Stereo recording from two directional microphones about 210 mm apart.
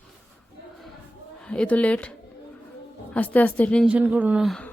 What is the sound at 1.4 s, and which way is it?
Speech, 5° left (ahead or behind).